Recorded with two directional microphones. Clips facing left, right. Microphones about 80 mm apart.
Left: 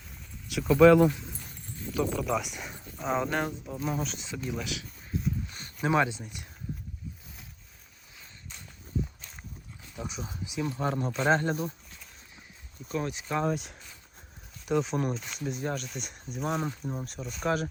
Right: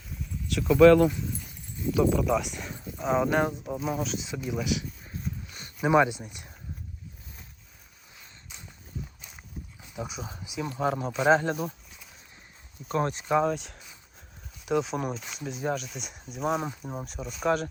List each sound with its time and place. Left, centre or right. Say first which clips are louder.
0.1 s speech: right 4 dB; centre
4.9 s a sound: left 4 dB; centre; by 6.5 s right
9.8 s dog: right 2 dB; centre
10.2 s speech: left 1 dB; centre
11.6 s a sound: right 1 dB; centre
12.9 s speech: right 5 dB; right
13.2 s speech: right 6 dB; centre
13.5 s speech: even; centre
17.1 s speech: right 4 dB; centre